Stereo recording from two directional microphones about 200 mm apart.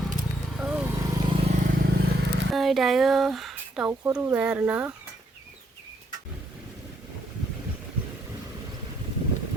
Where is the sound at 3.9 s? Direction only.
15° right (ahead or behind).